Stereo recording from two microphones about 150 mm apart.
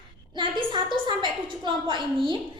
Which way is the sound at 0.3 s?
30° right (ahead or behind).